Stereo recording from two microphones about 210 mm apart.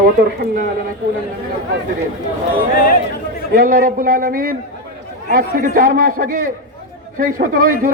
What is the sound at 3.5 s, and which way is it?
A man's voice, 40° right (ahead or behind).